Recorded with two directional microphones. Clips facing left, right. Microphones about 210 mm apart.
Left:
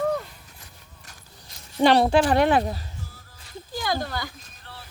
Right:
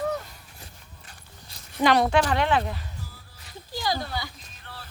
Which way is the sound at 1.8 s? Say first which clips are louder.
Left 3 dB; 30° left (ahead or behind).